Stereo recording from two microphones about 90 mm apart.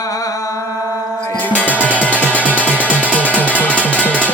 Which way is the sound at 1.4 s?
15° left (ahead or behind).